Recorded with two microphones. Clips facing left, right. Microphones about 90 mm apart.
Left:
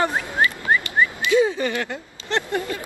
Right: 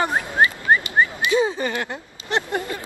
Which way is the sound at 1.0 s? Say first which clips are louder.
Left 1 dB; 25° right (ahead or behind).